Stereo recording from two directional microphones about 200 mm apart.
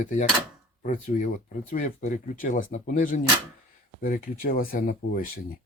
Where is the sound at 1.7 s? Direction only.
35° left (ahead or behind).